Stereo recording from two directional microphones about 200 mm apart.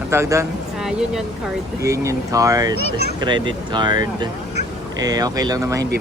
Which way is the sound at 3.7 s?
20° right (ahead or behind).